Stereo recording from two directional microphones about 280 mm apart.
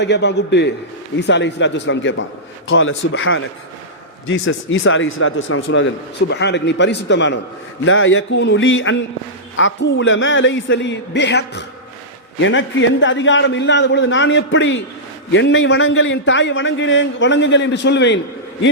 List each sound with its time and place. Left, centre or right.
0.0 s a man's voice: left